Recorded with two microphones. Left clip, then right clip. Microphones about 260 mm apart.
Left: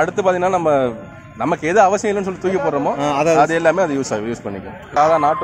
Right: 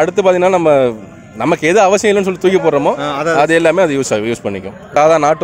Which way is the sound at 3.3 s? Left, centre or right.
Right.